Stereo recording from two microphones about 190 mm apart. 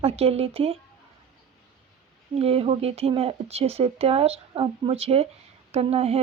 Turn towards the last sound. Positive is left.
turn(degrees=-30)  # may be behind; listen again after turning